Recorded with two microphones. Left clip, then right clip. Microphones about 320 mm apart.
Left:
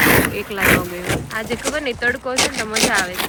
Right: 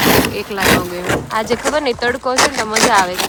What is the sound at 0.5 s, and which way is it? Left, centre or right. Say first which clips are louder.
Speech: right 2 dB; right.